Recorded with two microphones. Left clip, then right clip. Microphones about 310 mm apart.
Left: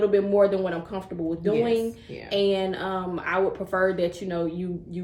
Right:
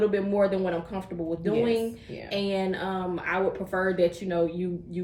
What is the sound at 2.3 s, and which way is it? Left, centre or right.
A woman's voice, centre.